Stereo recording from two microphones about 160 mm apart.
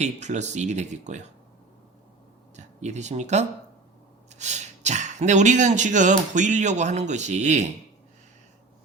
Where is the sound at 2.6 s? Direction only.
45° right (ahead or behind).